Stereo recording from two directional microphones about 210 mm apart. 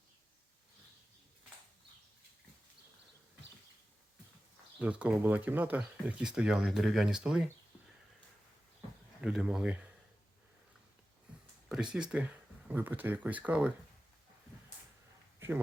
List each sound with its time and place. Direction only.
4.8 s speech: 5° right (ahead or behind)
9.2 s speech: 5° right (ahead or behind)
11.7 s speech: 5° right (ahead or behind)
15.4 s a sound: 10° right (ahead or behind)